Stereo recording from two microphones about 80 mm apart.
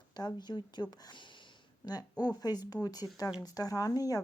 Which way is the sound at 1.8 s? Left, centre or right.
Left.